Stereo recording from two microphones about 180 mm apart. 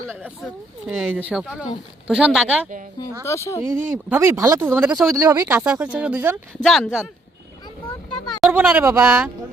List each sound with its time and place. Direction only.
0.4 s speech: 5° right (ahead or behind)
3.2 s speech: 15° left (ahead or behind)
3.6 s speech: 15° right (ahead or behind)
5.1 s speech: 15° right (ahead or behind); by 7.1 s centre (ahead or behind)
8.4 s speech: 10° right (ahead or behind)